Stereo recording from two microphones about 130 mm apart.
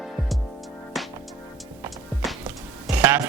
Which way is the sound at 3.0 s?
15° right (ahead or behind).